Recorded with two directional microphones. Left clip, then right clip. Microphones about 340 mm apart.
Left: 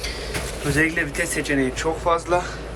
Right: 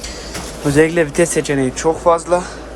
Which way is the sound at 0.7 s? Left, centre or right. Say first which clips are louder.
Right 8 dB; centre.